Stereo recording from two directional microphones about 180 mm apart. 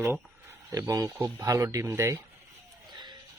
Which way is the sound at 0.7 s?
20° right (ahead or behind).